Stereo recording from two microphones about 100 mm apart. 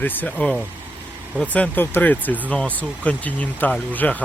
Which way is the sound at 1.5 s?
15° left (ahead or behind).